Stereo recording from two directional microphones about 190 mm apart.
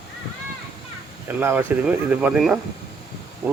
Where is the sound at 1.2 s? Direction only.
10° right (ahead or behind).